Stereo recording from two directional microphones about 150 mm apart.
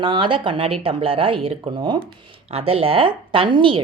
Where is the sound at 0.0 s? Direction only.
35° right (ahead or behind).